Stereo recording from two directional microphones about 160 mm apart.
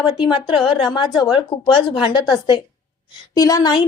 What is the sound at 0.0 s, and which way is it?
A woman's voice, 30° left (ahead or behind).